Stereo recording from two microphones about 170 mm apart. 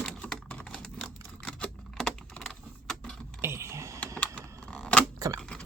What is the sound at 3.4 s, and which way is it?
Typing, 15° right (ahead or behind).